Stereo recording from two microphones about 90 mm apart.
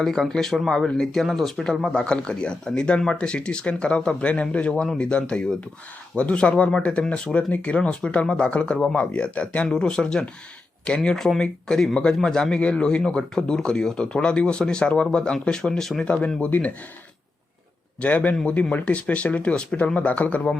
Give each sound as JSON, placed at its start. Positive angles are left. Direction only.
{"t": 0.0, "sound": "speech", "side_deg": 5}
{"t": 16.2, "sound": "speech", "side_deg": 15}
{"t": 18.0, "sound": "speech", "side_deg": 15}